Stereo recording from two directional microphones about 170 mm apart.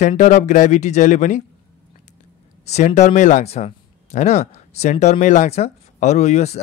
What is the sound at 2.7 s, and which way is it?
Speech, 45° left (ahead or behind).